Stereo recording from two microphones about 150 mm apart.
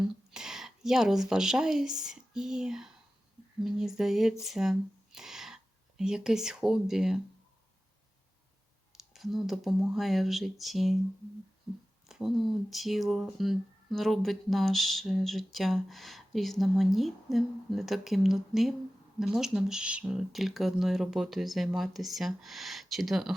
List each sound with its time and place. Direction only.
0.3 s speech: 5° right (ahead or behind)
8.9 s speech: centre (ahead or behind)
12.0 s a sound: 5° right (ahead or behind)
12.7 s speech: centre (ahead or behind)